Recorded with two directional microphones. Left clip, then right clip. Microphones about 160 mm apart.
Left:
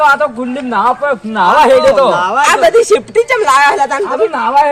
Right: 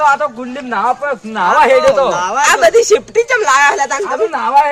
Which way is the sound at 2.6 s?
Centre (ahead or behind).